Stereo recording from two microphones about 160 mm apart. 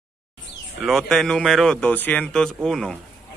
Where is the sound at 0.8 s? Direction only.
Centre (ahead or behind).